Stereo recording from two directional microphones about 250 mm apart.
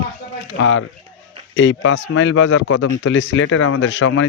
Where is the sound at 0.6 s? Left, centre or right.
Left.